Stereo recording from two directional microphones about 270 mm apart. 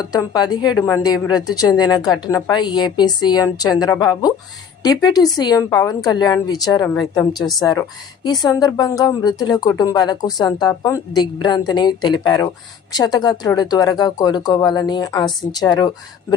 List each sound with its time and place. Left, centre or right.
0.0 s speech: centre